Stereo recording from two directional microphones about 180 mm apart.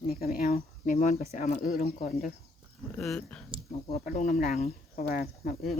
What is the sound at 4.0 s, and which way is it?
Speech, 55° left (ahead or behind).